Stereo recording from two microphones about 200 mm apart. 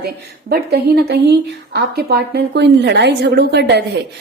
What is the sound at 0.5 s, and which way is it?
Speech, 55° right (ahead or behind).